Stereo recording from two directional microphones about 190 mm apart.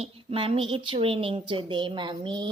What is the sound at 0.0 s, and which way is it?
A woman's voice, 30° right (ahead or behind).